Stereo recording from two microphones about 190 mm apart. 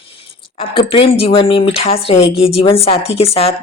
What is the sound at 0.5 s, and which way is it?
Speech, 25° left (ahead or behind).